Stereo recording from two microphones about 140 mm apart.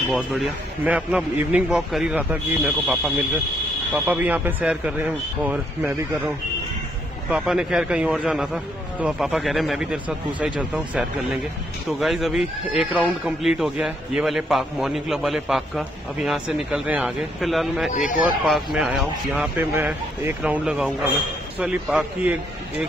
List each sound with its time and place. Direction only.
0.8 s speech: 10° right (ahead or behind)
17.9 s speech: 65° left (ahead or behind)
18.4 s speech: centre (ahead or behind)
19.5 s speech: 20° right (ahead or behind)